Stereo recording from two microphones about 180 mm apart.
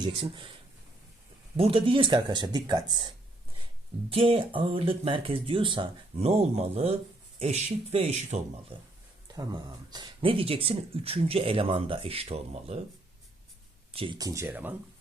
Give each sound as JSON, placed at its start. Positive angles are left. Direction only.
{"t": 0.0, "sound": "speech", "side_deg": -30}
{"t": 1.5, "sound": "speech", "side_deg": -30}
{"t": 4.1, "sound": "speech", "side_deg": -30}
{"t": 13.9, "sound": "speech", "side_deg": -30}